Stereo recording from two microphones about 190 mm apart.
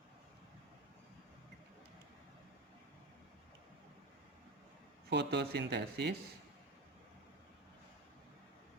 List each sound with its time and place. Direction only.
5.0 s speech: 60° right (ahead or behind)